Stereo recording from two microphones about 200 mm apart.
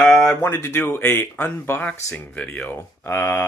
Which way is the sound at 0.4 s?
15° left (ahead or behind).